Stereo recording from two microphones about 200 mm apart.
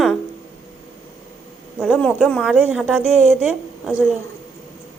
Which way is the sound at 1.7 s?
Centre (ahead or behind).